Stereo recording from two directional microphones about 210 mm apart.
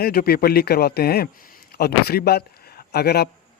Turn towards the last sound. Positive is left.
turn(degrees=50)  # may be behind; listen again after turning